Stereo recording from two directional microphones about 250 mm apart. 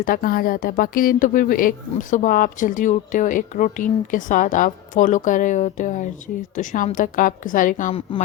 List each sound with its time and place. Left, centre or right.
0.0 s a woman's voice: left